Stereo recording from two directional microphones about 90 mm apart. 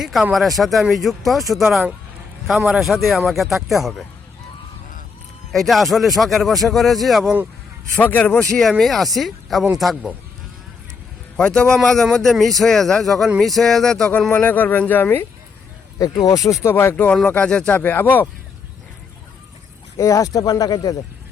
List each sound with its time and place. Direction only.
0.0 s a man's voice: 5° right (ahead or behind)
5.5 s a man's voice: centre (ahead or behind)
7.9 s a man's voice: 15° left (ahead or behind)
8.8 s a man's voice: centre (ahead or behind)
11.3 s a man's voice: 10° left (ahead or behind)
14.1 s speech: 20° left (ahead or behind)
16.0 s speech: 45° left (ahead or behind); by 18.3 s 20° left (ahead or behind)
20.0 s speech: 35° left (ahead or behind)